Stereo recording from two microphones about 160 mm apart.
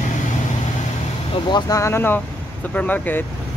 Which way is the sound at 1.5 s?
20° left (ahead or behind).